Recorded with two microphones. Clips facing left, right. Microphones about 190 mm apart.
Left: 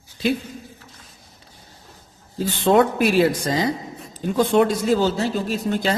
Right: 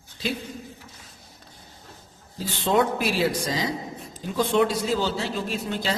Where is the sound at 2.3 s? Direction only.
55° left (ahead or behind).